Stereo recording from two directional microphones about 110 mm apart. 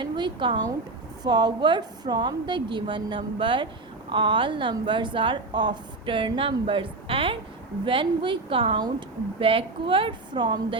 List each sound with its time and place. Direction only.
0.0 s a woman's voice: 45° right (ahead or behind)